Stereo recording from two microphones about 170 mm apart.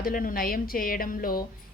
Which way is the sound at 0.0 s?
55° left (ahead or behind).